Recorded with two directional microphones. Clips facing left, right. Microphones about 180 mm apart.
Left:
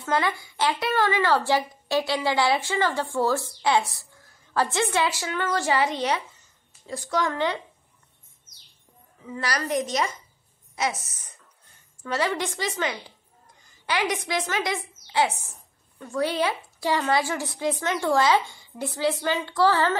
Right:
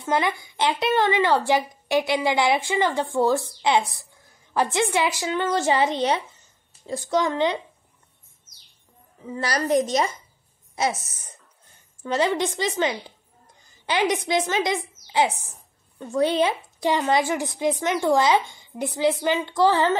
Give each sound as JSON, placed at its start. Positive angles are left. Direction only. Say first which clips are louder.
{"t": 0.0, "sound": "a woman's voice", "louder": "right 2 dB", "side_deg": -15}
{"t": 9.2, "sound": "a woman's voice", "louder": "right 3 dB", "side_deg": -30}